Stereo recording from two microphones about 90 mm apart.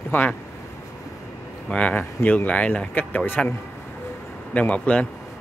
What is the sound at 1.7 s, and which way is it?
Speech, 15° left (ahead or behind).